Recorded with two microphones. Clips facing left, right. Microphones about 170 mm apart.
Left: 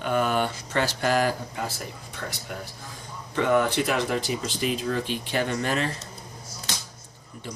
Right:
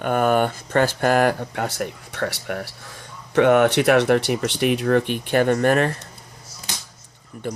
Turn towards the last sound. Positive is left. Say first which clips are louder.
# right 9 dB
turn(degrees=-55)  # may be behind; listen again after turning